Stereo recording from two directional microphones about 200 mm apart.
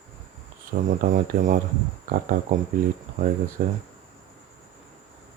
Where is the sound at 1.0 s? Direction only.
40° right (ahead or behind).